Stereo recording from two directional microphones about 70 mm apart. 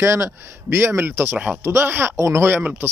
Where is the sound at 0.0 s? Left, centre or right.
Right.